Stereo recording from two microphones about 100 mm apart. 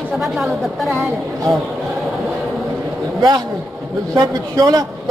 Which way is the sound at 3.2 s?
45° right (ahead or behind).